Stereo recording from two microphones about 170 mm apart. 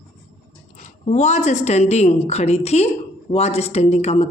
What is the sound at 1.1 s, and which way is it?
Speech, 40° left (ahead or behind).